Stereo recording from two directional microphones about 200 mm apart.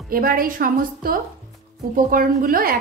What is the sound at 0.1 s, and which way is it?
Speech, 45° right (ahead or behind).